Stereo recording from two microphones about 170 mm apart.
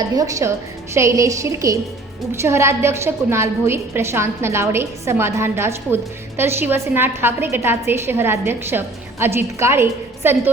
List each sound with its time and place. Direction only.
0.2 s a woman's voice: 20° right (ahead or behind)